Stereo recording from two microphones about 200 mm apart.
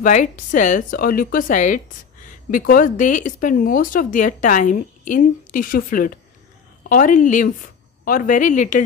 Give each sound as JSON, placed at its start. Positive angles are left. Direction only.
{"t": 0.0, "sound": "a woman's voice", "side_deg": 40}